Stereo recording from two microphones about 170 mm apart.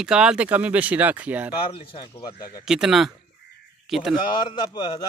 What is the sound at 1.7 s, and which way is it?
Speech, 30° left (ahead or behind).